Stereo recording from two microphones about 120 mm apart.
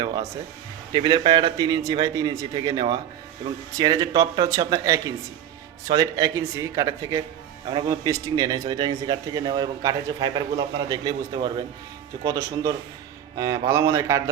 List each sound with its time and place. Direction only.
0.0 s speech: 35° right (ahead or behind)
12.2 s speech: 30° right (ahead or behind)